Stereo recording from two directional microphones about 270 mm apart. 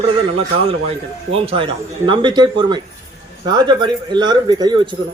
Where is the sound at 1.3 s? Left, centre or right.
Right.